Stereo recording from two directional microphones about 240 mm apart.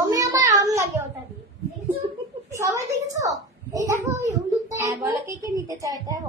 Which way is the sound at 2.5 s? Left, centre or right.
Centre.